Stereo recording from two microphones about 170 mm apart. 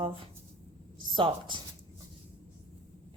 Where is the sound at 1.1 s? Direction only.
30° right (ahead or behind).